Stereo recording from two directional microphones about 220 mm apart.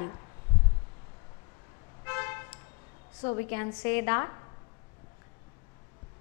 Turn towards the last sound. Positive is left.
turn(degrees=15)  # may be behind; listen again after turning